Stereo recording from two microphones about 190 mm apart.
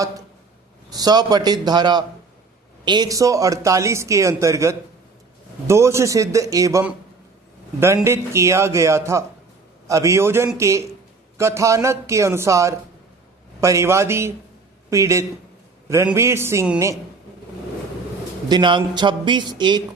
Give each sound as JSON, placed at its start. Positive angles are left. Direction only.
{"t": 0.9, "sound": "a man's voice", "side_deg": -20}
{"t": 18.4, "sound": "a man's voice", "side_deg": -25}